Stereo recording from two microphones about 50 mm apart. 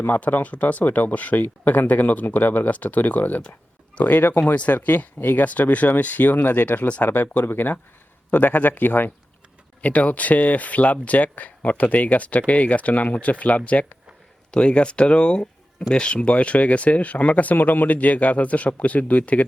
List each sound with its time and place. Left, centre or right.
0.2 s speech: left
4.2 s speech: left
4.5 s speech: left
7.1 s speech: left
9.8 s speech: left